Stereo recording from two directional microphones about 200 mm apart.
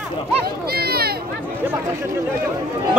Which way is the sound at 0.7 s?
50° right (ahead or behind).